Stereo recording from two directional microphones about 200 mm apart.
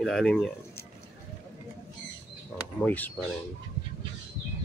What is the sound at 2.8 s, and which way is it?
Speech, 10° left (ahead or behind).